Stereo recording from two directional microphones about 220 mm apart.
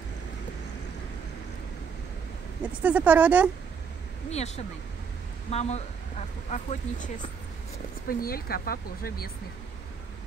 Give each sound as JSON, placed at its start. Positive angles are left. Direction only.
{"t": 2.8, "sound": "speech", "side_deg": -5}
{"t": 4.3, "sound": "speech", "side_deg": 30}
{"t": 8.1, "sound": "speech", "side_deg": 40}